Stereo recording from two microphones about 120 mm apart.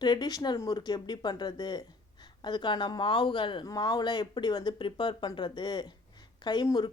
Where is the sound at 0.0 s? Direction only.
35° left (ahead or behind).